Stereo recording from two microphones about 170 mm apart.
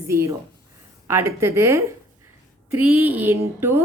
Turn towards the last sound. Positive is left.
turn(degrees=-15)  # may be behind; listen again after turning